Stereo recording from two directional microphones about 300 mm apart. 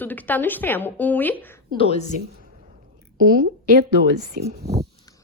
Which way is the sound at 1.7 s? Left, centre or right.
Centre.